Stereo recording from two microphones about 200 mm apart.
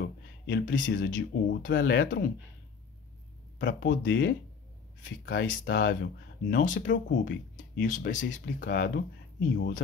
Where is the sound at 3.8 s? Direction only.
60° left (ahead or behind).